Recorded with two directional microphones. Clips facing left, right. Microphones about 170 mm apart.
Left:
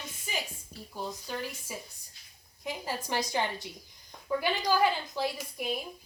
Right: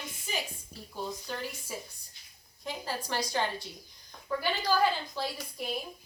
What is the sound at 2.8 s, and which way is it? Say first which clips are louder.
A woman's voice: left 1 dB; 15° left (ahead or behind).